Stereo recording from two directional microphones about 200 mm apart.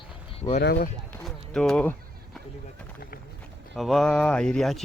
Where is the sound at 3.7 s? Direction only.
Centre (ahead or behind).